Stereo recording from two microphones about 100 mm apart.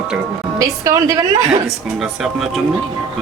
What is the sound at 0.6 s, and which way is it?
Speech, 35° right (ahead or behind).